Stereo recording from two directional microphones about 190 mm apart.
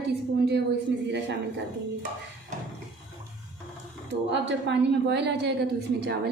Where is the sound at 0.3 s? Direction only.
60° right (ahead or behind).